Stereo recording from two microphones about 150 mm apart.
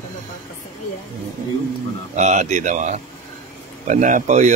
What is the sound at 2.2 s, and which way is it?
A man's voice, 50° right (ahead or behind).